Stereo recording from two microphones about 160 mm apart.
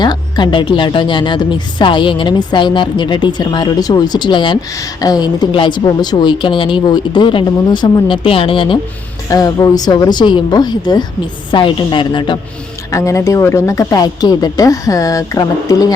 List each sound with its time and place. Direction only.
0.0 s a woman's voice: 30° left (ahead or behind)
9.3 s a woman's voice: 20° left (ahead or behind)
12.9 s a woman's voice: 20° left (ahead or behind)